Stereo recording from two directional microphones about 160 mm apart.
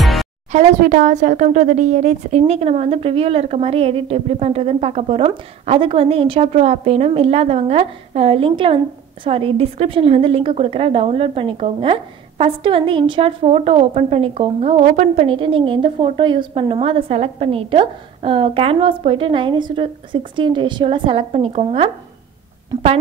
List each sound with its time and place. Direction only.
0.0 s music: centre (ahead or behind)
0.5 s speech: 50° right (ahead or behind)
15.3 s speech: 35° right (ahead or behind)